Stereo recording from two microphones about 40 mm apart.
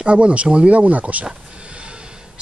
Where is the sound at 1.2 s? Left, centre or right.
Right.